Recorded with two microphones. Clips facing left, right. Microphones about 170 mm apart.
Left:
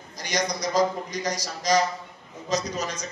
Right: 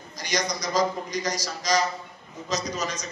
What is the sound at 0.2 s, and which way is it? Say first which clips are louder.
A man's voice: left 1 dB; 60° left (ahead or behind).